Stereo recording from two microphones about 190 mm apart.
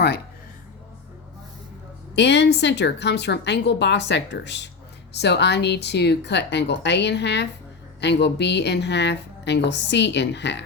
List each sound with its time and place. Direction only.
2.1 s a woman's voice: 65° left (ahead or behind)